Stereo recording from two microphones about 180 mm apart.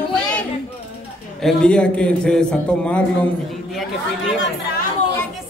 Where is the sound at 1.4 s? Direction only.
5° left (ahead or behind).